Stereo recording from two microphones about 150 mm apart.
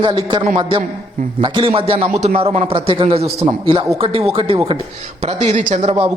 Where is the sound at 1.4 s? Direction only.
35° right (ahead or behind).